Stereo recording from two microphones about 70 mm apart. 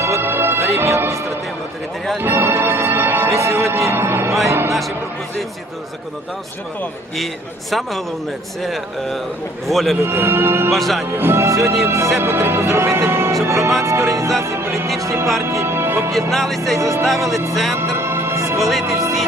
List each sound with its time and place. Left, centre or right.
0.0 s music: right
3.5 s speech: right
7.7 s speech: centre
10.0 s speech: right
10.7 s speech: centre
11.2 s speech: right
13.3 s music: right
15.0 s speech: right
16.1 s speech: centre
16.7 s music: right
17.5 s speech: centre
17.7 s music: right
18.6 s speech: centre
18.9 s music: right